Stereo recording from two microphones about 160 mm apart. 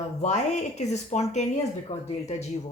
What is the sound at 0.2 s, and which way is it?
Speech, 45° left (ahead or behind).